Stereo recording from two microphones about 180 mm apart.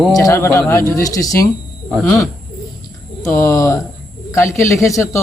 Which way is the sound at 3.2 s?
15° left (ahead or behind).